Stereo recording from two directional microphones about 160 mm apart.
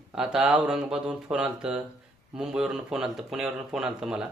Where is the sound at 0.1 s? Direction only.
5° right (ahead or behind).